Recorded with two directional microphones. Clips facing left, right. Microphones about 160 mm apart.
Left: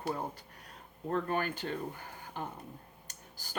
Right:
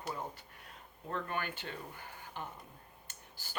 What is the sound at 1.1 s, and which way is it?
Speech, 40° left (ahead or behind).